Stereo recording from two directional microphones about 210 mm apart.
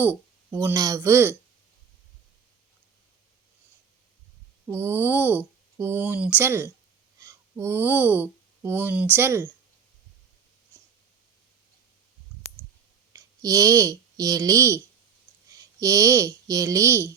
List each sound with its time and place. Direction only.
0.0 s speech: 10° right (ahead or behind)
4.7 s speech: 10° right (ahead or behind)
13.1 s speech: 15° right (ahead or behind)